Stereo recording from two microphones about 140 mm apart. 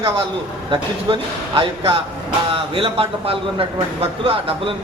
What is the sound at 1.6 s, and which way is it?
A man's voice, 40° right (ahead or behind).